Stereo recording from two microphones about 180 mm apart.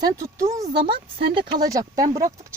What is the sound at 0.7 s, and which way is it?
Speech, 25° right (ahead or behind).